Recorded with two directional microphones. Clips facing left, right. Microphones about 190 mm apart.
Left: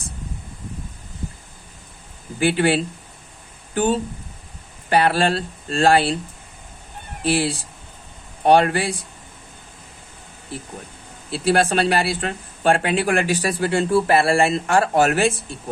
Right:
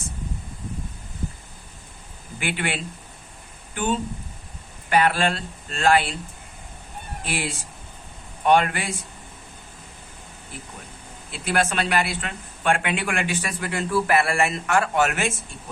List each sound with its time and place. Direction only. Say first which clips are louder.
2.4 s speech: left 10 dB; 35° left (ahead or behind)
4.9 s speech: left 3 dB; 35° left (ahead or behind)
7.3 s speech: left 9 dB; 35° left (ahead or behind)
11.3 s speech: left 6 dB; 35° left (ahead or behind)